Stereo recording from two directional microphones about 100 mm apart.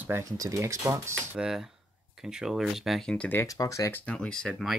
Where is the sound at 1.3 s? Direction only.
5° right (ahead or behind).